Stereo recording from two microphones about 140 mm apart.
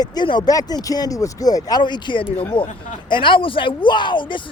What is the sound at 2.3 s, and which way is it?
Speech, 15° left (ahead or behind).